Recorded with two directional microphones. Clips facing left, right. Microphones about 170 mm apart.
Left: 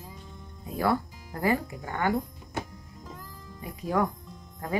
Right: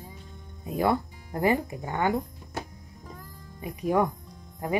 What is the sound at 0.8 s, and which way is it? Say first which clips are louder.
Speech: right 1 dB; 20° right (ahead or behind).